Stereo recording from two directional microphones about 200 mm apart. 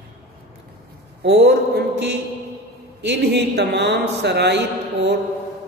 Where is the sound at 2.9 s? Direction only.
60° right (ahead or behind).